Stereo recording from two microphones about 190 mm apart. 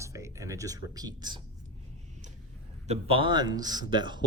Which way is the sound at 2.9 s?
30° right (ahead or behind).